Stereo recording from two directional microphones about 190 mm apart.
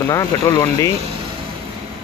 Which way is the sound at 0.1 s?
15° left (ahead or behind).